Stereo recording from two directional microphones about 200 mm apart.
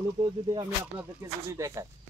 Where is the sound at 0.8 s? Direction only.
15° right (ahead or behind).